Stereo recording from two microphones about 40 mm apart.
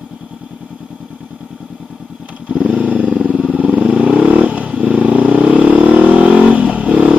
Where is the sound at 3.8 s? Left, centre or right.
Right.